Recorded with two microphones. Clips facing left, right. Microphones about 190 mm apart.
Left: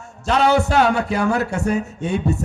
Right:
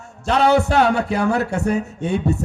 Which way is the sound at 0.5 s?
60° right (ahead or behind).